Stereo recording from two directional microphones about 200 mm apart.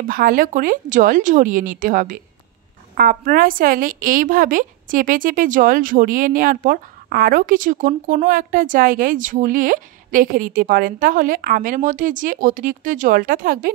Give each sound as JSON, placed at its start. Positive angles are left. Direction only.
{"t": 0.0, "sound": "a woman's voice", "side_deg": -45}